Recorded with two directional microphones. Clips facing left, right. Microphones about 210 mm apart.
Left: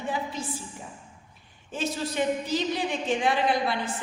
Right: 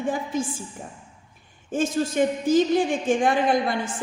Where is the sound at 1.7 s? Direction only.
50° right (ahead or behind).